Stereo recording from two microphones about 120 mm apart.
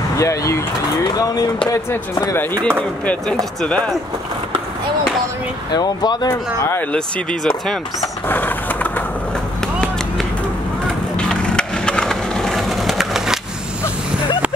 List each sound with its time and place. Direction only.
0.2 s speech: 25° left (ahead or behind)
1.7 s speech: 30° left (ahead or behind)
3.6 s speech: 10° left (ahead or behind)
5.7 s speech: 35° left (ahead or behind)
11.1 s skateboard: 5° left (ahead or behind)